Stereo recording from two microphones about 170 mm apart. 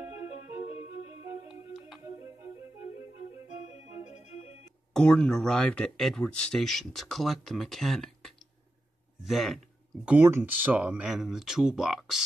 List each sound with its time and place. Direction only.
1.2 s music: 20° right (ahead or behind)
4.9 s speech: 5° left (ahead or behind)
10.0 s speech: 15° right (ahead or behind)